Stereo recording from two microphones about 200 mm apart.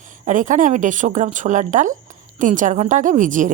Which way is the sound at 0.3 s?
40° right (ahead or behind).